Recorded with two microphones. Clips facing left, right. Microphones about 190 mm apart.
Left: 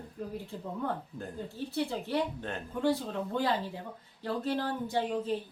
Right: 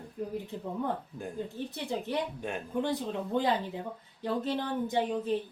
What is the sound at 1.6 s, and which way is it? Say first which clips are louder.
A woman's voice: left 4 dB; 20° right (ahead or behind).